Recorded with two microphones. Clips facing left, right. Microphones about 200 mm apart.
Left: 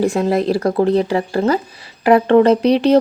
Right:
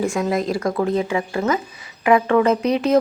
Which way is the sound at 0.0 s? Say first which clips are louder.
Left 5 dB; 35° left (ahead or behind).